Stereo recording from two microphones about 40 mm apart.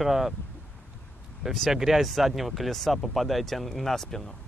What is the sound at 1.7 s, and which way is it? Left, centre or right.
Speech, centre.